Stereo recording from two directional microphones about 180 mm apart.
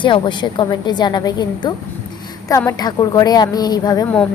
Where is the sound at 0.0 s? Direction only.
25° left (ahead or behind).